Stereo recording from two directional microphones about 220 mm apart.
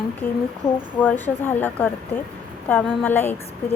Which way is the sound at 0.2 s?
40° left (ahead or behind).